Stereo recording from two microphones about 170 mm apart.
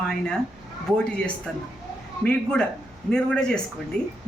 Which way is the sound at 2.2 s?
5° left (ahead or behind).